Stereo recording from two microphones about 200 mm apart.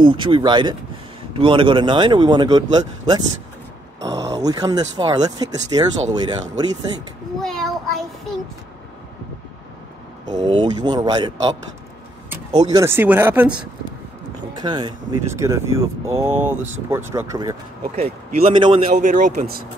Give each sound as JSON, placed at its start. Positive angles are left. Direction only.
{"t": 0.0, "sound": "speech", "side_deg": -25}
{"t": 4.0, "sound": "speech", "side_deg": -15}
{"t": 7.3, "sound": "child singing", "side_deg": 0}
{"t": 10.3, "sound": "speech", "side_deg": -20}
{"t": 12.5, "sound": "speech", "side_deg": -20}
{"t": 14.6, "sound": "speech", "side_deg": -25}
{"t": 17.9, "sound": "speech", "side_deg": -30}
{"t": 18.9, "sound": "a man's voice", "side_deg": -40}